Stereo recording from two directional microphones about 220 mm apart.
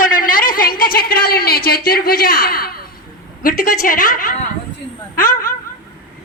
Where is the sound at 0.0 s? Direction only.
40° left (ahead or behind).